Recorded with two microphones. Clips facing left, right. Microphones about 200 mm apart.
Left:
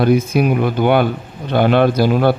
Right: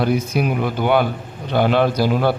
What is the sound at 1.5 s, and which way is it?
Speech, 60° left (ahead or behind).